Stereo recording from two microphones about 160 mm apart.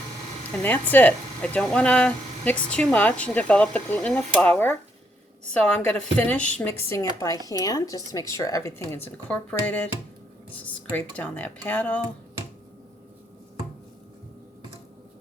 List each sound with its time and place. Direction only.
0.6 s speech: 10° left (ahead or behind)